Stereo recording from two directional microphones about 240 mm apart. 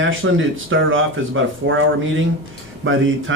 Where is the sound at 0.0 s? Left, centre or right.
Right.